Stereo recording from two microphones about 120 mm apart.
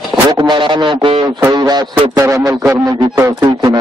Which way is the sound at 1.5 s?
35° right (ahead or behind).